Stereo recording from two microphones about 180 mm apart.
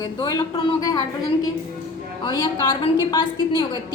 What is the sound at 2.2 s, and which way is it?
A woman's voice, 25° left (ahead or behind).